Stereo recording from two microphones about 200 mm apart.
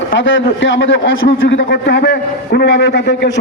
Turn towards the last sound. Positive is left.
turn(degrees=60)  # may be behind; listen again after turning